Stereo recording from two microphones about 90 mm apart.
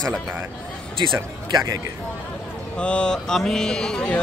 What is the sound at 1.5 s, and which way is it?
Speech, 45° right (ahead or behind).